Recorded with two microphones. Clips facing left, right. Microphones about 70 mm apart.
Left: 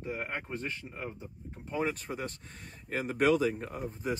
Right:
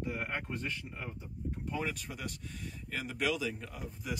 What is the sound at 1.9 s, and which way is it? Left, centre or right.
Speech, left.